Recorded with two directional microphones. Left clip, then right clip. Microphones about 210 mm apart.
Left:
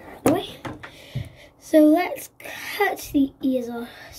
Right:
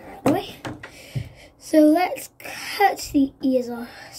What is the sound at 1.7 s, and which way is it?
A woman's voice, 10° right (ahead or behind).